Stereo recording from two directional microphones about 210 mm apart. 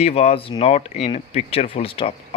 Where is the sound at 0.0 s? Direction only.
30° left (ahead or behind).